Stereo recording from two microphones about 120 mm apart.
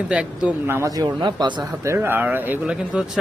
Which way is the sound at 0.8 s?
30° right (ahead or behind).